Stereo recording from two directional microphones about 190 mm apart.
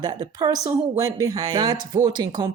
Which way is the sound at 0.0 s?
20° right (ahead or behind).